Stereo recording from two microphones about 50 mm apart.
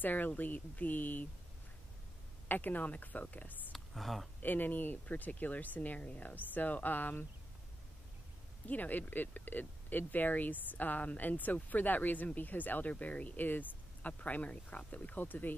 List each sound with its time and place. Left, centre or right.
0.0 s speech: left
2.4 s speech: left
3.7 s a sound: centre
4.4 s speech: left
8.6 s speech: left